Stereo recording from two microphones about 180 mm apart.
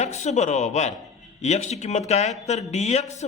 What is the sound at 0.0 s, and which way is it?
A man's voice, 40° left (ahead or behind).